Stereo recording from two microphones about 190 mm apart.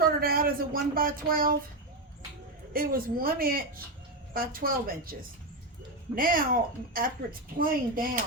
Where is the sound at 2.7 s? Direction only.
50° right (ahead or behind).